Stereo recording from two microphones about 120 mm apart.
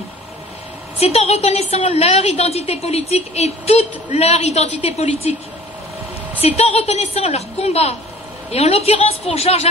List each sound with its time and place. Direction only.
0.9 s a woman's voice: 60° left (ahead or behind)
6.4 s a woman's voice: 60° left (ahead or behind)